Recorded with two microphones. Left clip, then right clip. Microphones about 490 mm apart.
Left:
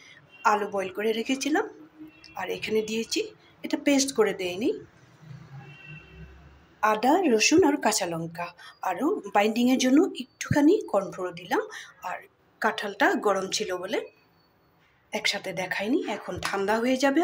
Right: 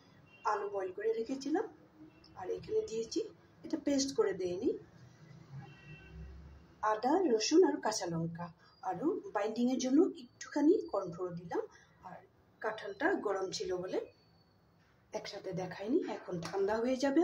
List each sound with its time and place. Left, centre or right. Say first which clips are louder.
1.1 s a woman's voice: left 9 dB; centre
6.8 s a woman's voice: left 9 dB; right
15.0 s a woman's voice: left 14 dB; right